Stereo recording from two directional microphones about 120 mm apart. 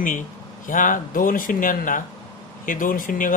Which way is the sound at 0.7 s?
90° left.